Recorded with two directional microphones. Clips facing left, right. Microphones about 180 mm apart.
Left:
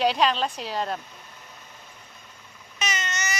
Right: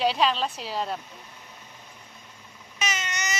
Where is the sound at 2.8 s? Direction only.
10° right (ahead or behind).